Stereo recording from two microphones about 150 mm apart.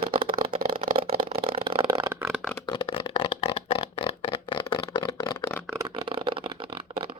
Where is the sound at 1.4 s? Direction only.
40° right (ahead or behind).